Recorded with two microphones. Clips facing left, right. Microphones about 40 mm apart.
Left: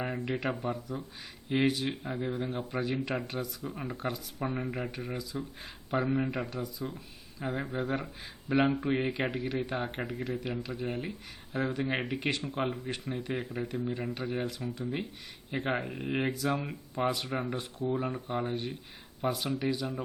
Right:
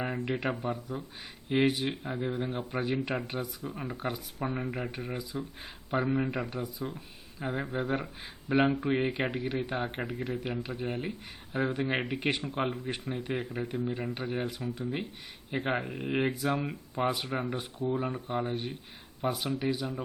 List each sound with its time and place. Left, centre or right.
0.0 s speech: centre
5.1 s speech: centre
5.9 s speech: centre
6.5 s speech: centre
7.3 s speech: centre
10.6 s speech: centre